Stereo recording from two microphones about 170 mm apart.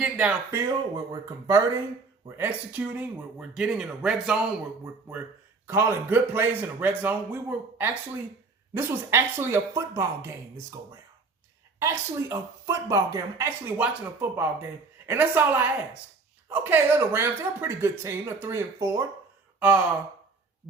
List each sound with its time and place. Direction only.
0.0 s speech: 10° right (ahead or behind)
5.6 s speech: 15° right (ahead or behind)
19.5 s gasp: 10° right (ahead or behind)